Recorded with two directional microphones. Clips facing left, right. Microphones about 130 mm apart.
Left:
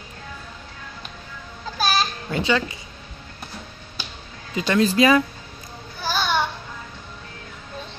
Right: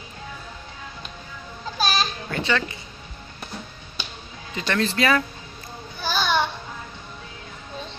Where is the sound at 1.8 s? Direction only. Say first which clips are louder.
Left 2 dB; 5° left (ahead or behind).